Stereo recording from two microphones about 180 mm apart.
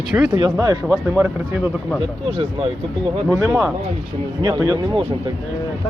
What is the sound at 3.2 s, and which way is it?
Speech, 15° right (ahead or behind).